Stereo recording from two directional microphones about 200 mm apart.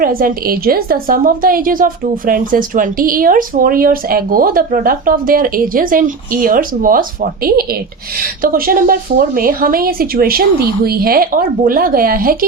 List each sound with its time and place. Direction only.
0.0 s a woman's voice: 45° right (ahead or behind)